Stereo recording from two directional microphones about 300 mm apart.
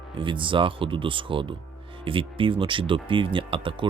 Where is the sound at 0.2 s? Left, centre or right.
Centre.